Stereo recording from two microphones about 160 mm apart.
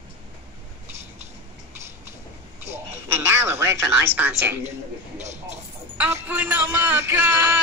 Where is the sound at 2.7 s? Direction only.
15° right (ahead or behind).